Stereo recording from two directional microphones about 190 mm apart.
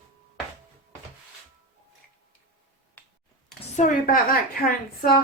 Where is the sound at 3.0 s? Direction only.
10° left (ahead or behind).